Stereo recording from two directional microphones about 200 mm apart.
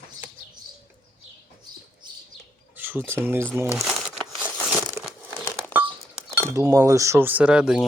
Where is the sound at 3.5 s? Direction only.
10° right (ahead or behind).